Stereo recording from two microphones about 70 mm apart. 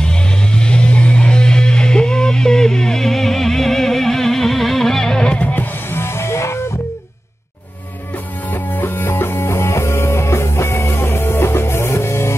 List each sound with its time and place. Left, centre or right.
0.0 s music: centre; by 6.6 s left
8.5 s music: left